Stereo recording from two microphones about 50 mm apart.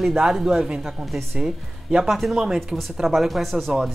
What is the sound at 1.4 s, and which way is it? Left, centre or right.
Speech, centre.